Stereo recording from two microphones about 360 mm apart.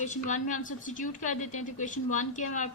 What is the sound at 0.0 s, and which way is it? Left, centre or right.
A woman's voice, left.